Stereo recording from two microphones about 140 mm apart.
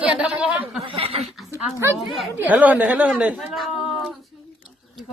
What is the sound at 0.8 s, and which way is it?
Chuckle, 40° right (ahead or behind).